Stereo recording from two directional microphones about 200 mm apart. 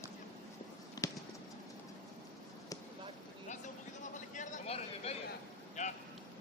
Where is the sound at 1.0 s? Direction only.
15° left (ahead or behind).